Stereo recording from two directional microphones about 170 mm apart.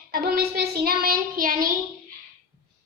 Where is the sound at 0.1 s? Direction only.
65° right (ahead or behind).